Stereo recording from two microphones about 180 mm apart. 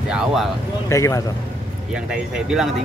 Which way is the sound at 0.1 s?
Centre (ahead or behind).